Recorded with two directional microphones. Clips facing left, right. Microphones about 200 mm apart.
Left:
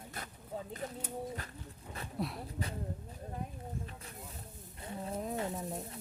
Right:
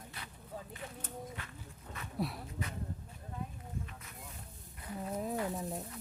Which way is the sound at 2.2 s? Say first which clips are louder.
Right 1 dB; centre (ahead or behind).